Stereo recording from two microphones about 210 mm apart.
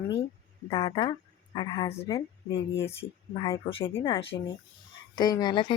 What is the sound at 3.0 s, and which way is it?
Speech, 25° left (ahead or behind).